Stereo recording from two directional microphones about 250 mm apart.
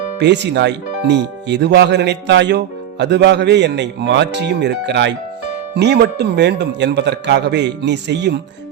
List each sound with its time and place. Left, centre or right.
0.2 s speech: right